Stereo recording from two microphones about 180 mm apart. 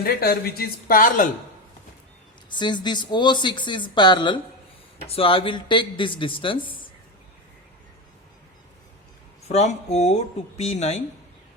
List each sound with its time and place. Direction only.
0.0 s speech: 60° left (ahead or behind)
2.5 s speech: 25° left (ahead or behind)
9.5 s speech: 35° left (ahead or behind)